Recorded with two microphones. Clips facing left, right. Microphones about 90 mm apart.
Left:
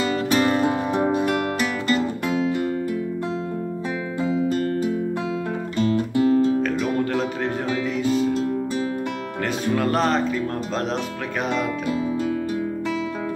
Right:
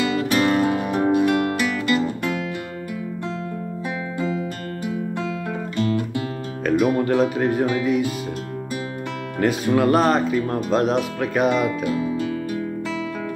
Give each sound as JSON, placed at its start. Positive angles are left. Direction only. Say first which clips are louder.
{"t": 0.0, "sound": "music", "louder": "even", "side_deg": 20}
{"t": 1.2, "sound": "music", "louder": "right 3 dB", "side_deg": -5}
{"t": 1.6, "sound": "music", "louder": "right 1 dB", "side_deg": 20}
{"t": 6.8, "sound": "music", "louder": "right 4 dB", "side_deg": -10}
{"t": 9.4, "sound": "speech", "louder": "right 5 dB", "side_deg": -10}